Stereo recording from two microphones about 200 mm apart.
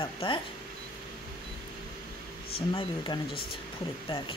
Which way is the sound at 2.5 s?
25° left (ahead or behind).